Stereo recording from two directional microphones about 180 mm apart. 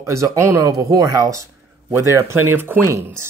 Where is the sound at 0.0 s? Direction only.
15° right (ahead or behind).